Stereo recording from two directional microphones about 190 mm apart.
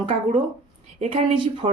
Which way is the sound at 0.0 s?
30° right (ahead or behind).